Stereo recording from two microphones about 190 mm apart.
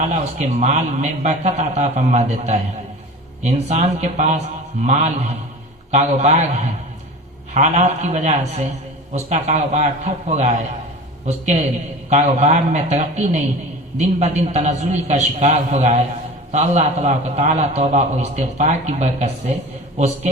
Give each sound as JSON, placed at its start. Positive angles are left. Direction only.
{"t": 0.1, "sound": "a man's voice", "side_deg": -35}